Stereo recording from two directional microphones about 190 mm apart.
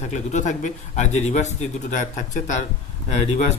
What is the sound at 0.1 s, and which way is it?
Speech, 40° left (ahead or behind).